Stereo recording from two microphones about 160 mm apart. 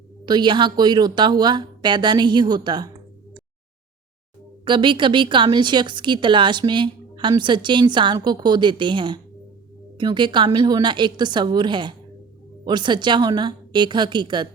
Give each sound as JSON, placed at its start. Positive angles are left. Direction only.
{"t": 0.3, "sound": "speech", "side_deg": -30}
{"t": 4.6, "sound": "speech", "side_deg": -30}